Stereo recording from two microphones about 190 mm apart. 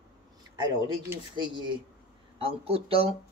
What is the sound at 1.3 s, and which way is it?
Speech, 25° right (ahead or behind).